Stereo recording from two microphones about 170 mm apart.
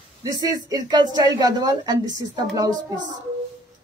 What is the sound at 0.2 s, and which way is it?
Speech, 25° right (ahead or behind).